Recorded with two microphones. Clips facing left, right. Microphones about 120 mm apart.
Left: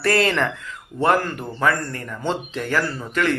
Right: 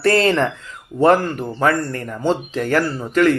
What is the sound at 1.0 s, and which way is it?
Speech, 40° right (ahead or behind).